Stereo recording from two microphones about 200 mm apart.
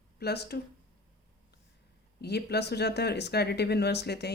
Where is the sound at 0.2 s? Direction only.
55° left (ahead or behind).